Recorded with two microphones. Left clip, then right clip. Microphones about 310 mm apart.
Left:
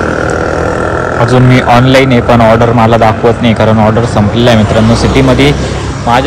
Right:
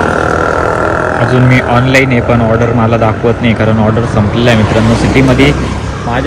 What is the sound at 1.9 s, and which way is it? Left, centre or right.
Speech, centre.